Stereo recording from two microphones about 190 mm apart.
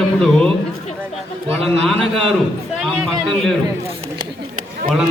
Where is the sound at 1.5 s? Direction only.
30° right (ahead or behind).